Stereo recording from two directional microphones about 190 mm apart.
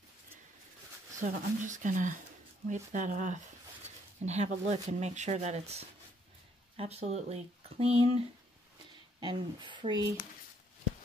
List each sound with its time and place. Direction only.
1.2 s speech: 40° right (ahead or behind)
9.2 s speech: 25° right (ahead or behind)